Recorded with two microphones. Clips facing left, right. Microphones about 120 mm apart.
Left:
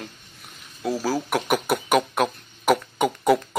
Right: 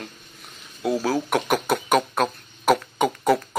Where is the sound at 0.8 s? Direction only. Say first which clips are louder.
Right 2 dB; centre (ahead or behind).